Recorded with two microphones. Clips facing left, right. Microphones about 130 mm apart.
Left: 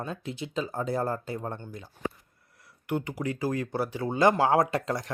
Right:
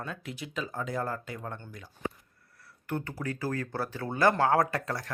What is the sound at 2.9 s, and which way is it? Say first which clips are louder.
Speech: left 4 dB; 15° left (ahead or behind).